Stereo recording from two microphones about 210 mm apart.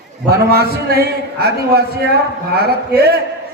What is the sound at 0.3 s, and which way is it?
A man's voice, 50° right (ahead or behind).